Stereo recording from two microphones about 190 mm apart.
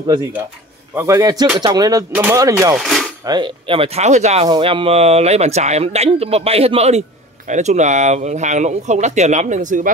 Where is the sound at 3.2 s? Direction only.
25° right (ahead or behind).